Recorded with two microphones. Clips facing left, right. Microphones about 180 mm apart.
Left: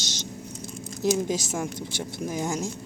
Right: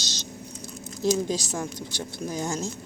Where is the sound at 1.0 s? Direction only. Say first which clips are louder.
Even; 20° left (ahead or behind).